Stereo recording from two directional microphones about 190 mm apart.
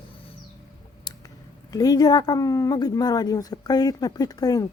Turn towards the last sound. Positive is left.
turn(degrees=20)  # may be behind; listen again after turning